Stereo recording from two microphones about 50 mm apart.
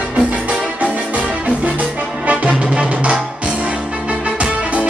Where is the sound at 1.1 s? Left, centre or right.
Right.